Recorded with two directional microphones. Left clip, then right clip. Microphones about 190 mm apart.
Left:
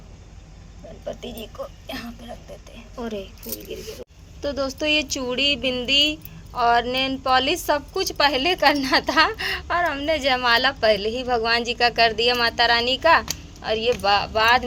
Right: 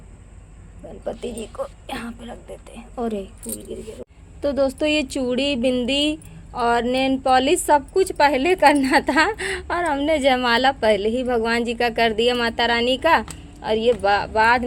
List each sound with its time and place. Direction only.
1.0 s a woman's voice: 55° right (ahead or behind)
4.4 s speech: 50° right (ahead or behind)